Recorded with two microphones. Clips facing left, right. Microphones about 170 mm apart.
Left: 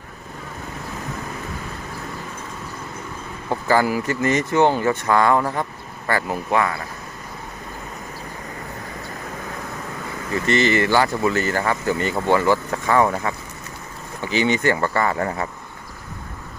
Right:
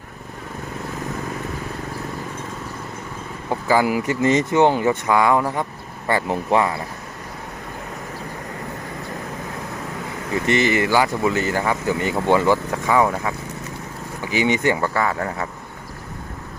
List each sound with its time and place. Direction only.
3.5 s speech: 10° right (ahead or behind)
6.1 s speech: 25° right (ahead or behind)
10.4 s speech: 15° right (ahead or behind)
12.9 s speech: 5° right (ahead or behind)